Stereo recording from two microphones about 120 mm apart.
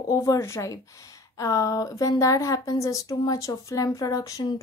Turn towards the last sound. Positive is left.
turn(degrees=30)  # may be behind; listen again after turning